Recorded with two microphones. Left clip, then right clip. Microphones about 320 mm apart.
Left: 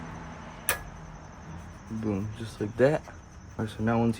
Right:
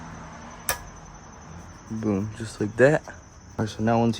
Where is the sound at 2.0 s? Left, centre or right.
Right.